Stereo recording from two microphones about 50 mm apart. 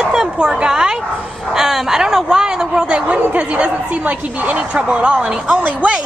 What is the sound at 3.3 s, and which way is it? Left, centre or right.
A woman's voice, right.